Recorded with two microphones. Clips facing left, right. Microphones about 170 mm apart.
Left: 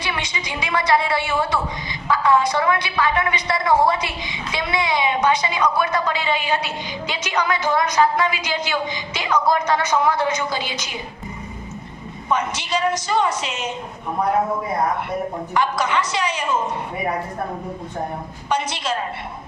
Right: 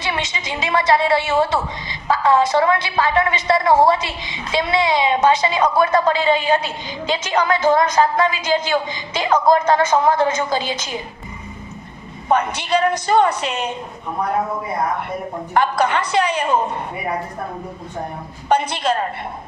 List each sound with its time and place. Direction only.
0.0 s a woman's voice: 25° right (ahead or behind)
5.9 s a woman's voice: 45° right (ahead or behind)
12.3 s a woman's voice: 55° right (ahead or behind)
15.5 s a woman's voice: 50° right (ahead or behind)
18.4 s a woman's voice: 50° right (ahead or behind)